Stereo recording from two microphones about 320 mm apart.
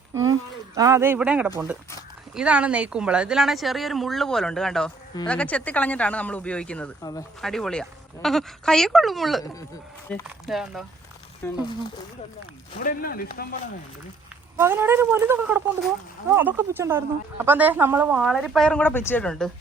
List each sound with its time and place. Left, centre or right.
0.1 s a sound: centre
0.8 s speech: centre
12.8 s speech: left
14.5 s speech: centre